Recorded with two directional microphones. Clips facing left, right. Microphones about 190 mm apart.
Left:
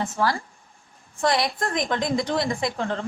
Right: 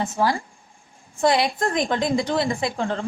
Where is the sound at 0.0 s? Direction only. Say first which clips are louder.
Right 2 dB; 20° right (ahead or behind).